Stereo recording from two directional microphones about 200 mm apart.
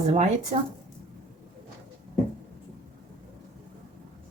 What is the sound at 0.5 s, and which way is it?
Speech, 35° right (ahead or behind).